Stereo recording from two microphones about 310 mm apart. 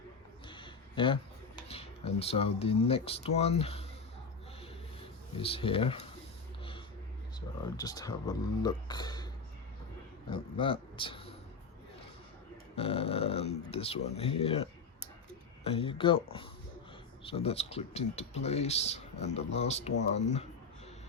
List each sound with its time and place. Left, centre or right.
0.4 s speech: centre
5.4 s speech: centre
7.8 s speech: centre
10.2 s speech: centre
12.7 s speech: centre